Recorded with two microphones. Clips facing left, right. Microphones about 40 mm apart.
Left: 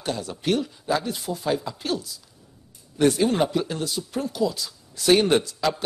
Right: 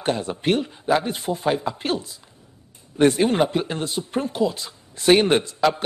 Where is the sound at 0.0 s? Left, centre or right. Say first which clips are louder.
Right 5 dB; right.